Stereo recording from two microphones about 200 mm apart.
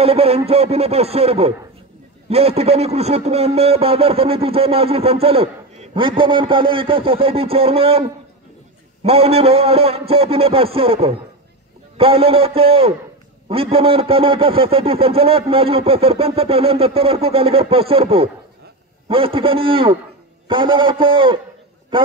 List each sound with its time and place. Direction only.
0.0 s a man's voice: 30° right (ahead or behind)
9.0 s a man's voice: 30° right (ahead or behind)